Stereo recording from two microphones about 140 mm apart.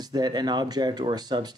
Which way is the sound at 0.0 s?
30° right (ahead or behind).